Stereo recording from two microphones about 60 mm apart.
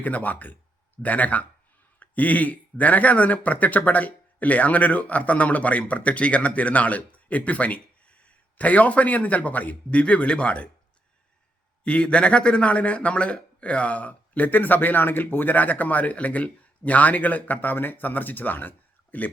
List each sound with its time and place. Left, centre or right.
0.0 s speech: left
11.8 s speech: centre